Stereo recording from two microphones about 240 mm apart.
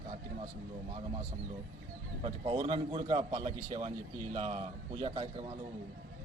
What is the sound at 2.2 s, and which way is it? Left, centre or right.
A man's voice, right.